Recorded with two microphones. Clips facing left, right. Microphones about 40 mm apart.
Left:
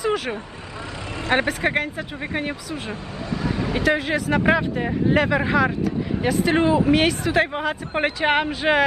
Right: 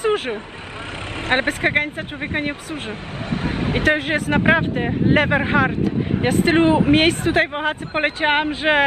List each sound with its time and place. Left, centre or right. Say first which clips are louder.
0.0 s vehicle: right 3 dB; right
1.2 s speech: right 2 dB; right